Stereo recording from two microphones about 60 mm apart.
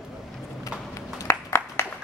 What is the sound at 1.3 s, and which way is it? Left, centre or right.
Clapping, left.